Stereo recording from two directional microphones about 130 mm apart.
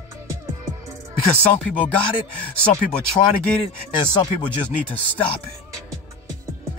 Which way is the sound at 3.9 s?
40° left (ahead or behind).